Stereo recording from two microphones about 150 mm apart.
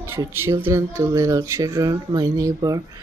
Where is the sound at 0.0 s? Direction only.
15° right (ahead or behind).